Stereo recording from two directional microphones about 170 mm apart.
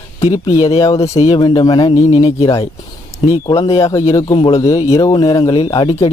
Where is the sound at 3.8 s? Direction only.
20° left (ahead or behind).